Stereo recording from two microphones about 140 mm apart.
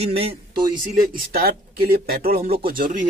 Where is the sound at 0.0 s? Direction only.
45° right (ahead or behind).